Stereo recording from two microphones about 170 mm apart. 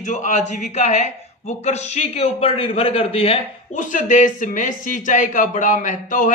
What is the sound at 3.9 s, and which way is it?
A man's voice, 50° left (ahead or behind).